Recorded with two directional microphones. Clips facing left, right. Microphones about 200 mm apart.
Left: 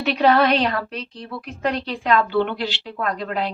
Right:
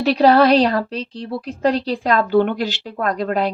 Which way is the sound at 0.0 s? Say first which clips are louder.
Right 4 dB; 35° right (ahead or behind).